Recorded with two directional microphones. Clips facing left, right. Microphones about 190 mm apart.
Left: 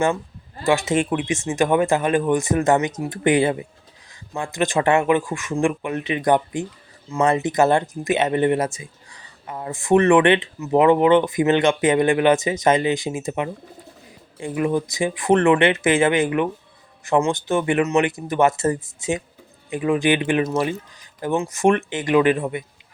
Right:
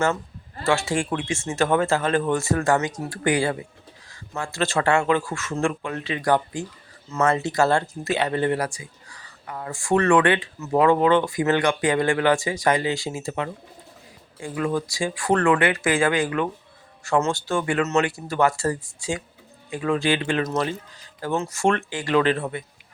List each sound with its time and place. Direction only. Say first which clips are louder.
0.6 s speech: left 3 dB; 15° left (ahead or behind)